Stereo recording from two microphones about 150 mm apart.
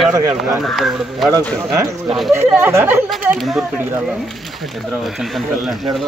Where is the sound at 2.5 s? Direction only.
15° right (ahead or behind).